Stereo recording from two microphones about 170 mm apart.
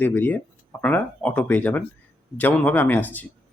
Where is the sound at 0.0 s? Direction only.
10° left (ahead or behind).